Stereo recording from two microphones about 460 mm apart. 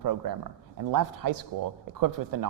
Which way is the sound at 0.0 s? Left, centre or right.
Right.